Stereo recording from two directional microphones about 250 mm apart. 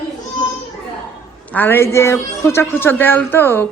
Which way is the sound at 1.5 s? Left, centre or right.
Centre.